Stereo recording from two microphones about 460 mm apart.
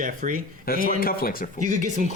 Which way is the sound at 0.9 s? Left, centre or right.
Centre.